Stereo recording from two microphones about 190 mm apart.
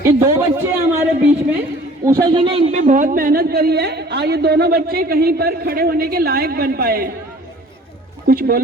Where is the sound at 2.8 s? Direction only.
45° right (ahead or behind).